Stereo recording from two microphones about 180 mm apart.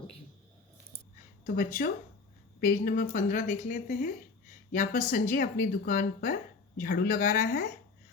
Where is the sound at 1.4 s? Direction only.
50° left (ahead or behind).